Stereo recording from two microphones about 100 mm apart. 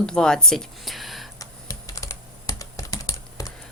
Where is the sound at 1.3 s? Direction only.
35° left (ahead or behind).